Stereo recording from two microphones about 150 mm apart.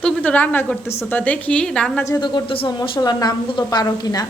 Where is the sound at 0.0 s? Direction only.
10° left (ahead or behind).